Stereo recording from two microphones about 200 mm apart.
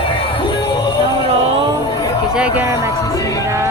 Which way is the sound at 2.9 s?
15° left (ahead or behind).